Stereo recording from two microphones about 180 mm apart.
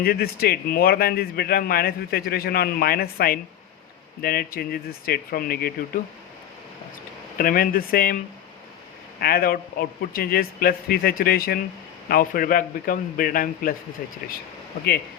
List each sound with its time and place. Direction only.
0.0 s speech: 60° left (ahead or behind)
7.3 s a man's voice: 55° left (ahead or behind)
9.2 s a man's voice: 55° left (ahead or behind)